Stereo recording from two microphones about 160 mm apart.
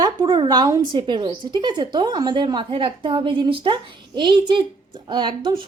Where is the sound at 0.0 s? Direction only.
30° right (ahead or behind).